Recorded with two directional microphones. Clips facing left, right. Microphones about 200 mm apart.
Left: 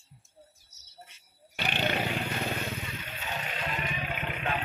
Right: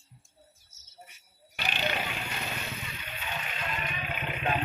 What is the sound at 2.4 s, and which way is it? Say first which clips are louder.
Vehicle: left 5 dB; 45° left (ahead or behind).